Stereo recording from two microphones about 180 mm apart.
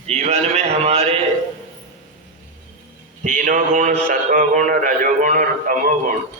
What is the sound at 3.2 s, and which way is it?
A man's voice, 45° right (ahead or behind).